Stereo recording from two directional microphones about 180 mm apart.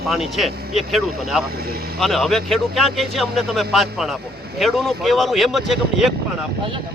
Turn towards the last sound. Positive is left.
turn(degrees=0)  # may be behind; listen again after turning